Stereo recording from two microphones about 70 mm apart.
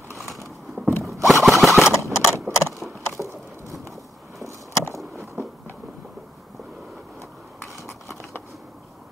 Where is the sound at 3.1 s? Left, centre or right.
Right.